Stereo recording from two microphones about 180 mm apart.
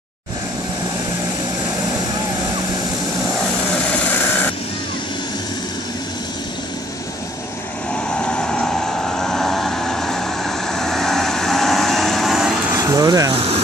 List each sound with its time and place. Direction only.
8.2 s vehicle: 5° left (ahead or behind)
12.7 s vehicle: 20° right (ahead or behind)
13.3 s speech: 30° right (ahead or behind)